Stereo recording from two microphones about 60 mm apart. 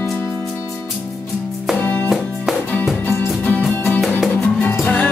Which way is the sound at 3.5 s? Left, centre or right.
Left.